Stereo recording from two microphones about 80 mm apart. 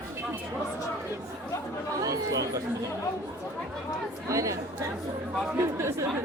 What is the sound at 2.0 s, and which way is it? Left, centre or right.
Speech, right.